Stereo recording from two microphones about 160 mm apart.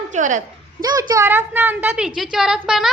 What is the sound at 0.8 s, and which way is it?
A woman's voice, 25° right (ahead or behind).